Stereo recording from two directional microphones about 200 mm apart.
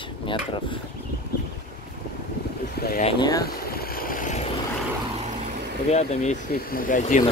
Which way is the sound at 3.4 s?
50° left (ahead or behind).